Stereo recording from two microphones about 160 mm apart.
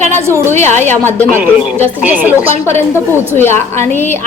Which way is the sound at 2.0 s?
10° right (ahead or behind).